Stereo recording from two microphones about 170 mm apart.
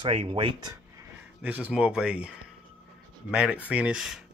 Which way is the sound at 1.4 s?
10° right (ahead or behind).